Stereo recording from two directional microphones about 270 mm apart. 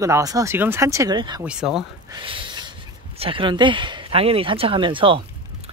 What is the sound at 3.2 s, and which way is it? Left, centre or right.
Speech, centre.